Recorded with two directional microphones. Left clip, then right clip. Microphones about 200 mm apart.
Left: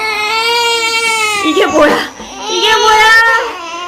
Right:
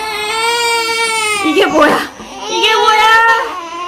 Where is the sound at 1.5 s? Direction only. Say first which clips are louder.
Even; 35° right (ahead or behind).